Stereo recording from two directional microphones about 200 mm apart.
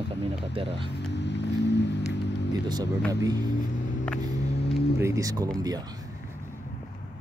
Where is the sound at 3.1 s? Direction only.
15° right (ahead or behind).